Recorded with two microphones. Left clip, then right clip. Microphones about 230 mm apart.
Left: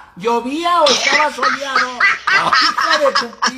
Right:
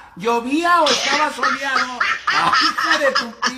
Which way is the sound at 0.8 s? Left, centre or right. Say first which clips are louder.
Left 4 dB; left.